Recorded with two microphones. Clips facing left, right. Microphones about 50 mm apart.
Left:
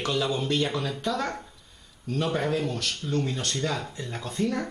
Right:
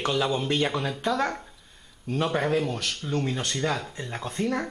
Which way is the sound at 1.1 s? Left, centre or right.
Centre.